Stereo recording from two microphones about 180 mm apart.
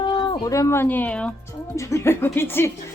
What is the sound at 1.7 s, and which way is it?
Speech, 15° left (ahead or behind).